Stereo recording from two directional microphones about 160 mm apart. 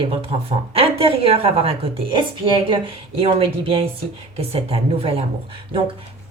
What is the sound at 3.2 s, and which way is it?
A woman's voice, 35° right (ahead or behind).